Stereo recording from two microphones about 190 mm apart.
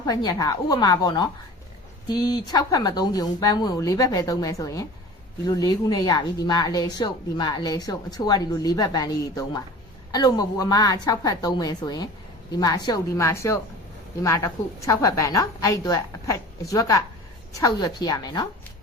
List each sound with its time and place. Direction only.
0.0 s a woman's voice: 20° left (ahead or behind)